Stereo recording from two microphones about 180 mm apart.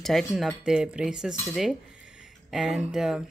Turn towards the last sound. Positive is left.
turn(degrees=-5)  # may be behind; listen again after turning